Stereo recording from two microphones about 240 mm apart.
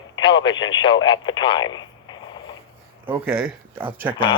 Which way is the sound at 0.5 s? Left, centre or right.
Left.